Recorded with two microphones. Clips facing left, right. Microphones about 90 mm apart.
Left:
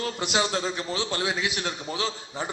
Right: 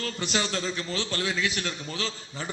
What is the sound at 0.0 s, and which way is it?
A man's voice, 15° left (ahead or behind).